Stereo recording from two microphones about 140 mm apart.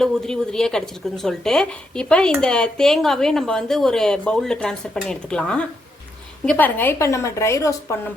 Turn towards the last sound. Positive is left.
turn(degrees=20)  # may be behind; listen again after turning